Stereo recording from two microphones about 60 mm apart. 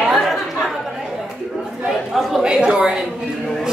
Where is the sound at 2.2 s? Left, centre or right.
Centre.